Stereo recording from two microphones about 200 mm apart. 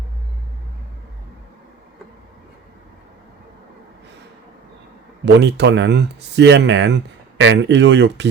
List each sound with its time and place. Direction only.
5.2 s speech: 60° right (ahead or behind)